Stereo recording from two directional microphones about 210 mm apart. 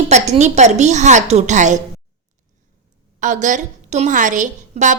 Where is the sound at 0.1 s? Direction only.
35° right (ahead or behind).